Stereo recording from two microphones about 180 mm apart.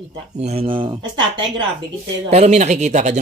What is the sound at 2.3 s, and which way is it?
Speech, 40° right (ahead or behind).